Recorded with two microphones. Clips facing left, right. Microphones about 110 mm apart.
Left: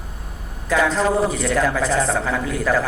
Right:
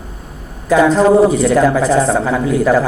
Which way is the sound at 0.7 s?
15° right (ahead or behind).